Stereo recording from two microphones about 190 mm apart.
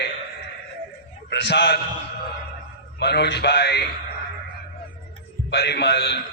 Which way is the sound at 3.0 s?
60° left (ahead or behind).